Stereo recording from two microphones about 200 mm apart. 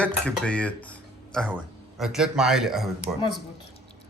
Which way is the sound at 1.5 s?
5° right (ahead or behind).